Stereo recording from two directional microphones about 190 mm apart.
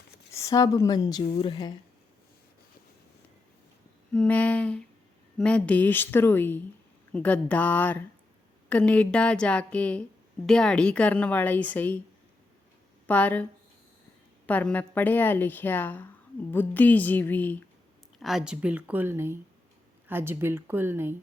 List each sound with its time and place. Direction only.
0.3 s a woman's voice: 20° left (ahead or behind)
4.1 s a woman's voice: 5° left (ahead or behind)
13.1 s a woman's voice: 10° left (ahead or behind)
18.2 s speech: centre (ahead or behind)